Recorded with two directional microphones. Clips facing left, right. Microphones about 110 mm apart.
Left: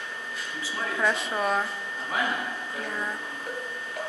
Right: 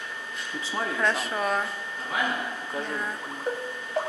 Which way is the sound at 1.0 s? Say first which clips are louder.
Left 2 dB; centre (ahead or behind).